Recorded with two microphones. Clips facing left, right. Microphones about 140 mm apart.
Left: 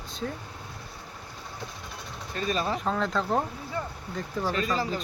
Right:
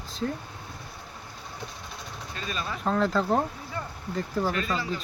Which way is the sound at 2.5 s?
35° left (ahead or behind).